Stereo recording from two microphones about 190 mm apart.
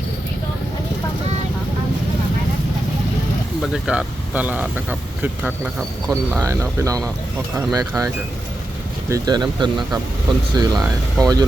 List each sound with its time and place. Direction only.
3.6 s speech: 5° right (ahead or behind)
6.4 s speech: 15° right (ahead or behind)